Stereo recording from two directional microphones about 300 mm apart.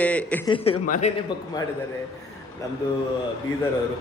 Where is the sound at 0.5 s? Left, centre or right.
Left.